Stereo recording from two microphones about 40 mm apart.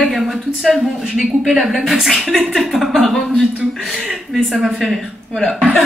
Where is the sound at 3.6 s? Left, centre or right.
Right.